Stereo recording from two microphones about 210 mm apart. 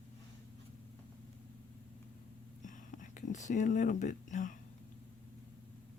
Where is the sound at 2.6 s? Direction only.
35° left (ahead or behind).